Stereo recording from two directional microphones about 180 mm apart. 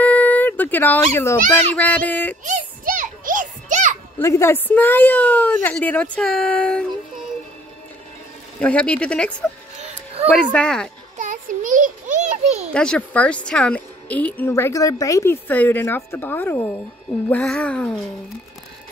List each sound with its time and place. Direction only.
0.0 s dog: 10° left (ahead or behind)
1.5 s a woman's voice: 10° left (ahead or behind)
2.4 s music: 45° right (ahead or behind)
4.2 s a woman's voice: 15° left (ahead or behind)
8.5 s a woman's voice: 5° left (ahead or behind)
10.3 s music: 5° left (ahead or behind)
11.1 s a sound: 45° right (ahead or behind)
12.7 s a woman's voice: 5° left (ahead or behind)
17.3 s music: 5° left (ahead or behind)